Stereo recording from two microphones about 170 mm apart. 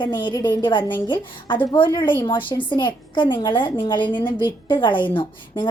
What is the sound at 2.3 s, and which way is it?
A woman's voice, 30° left (ahead or behind).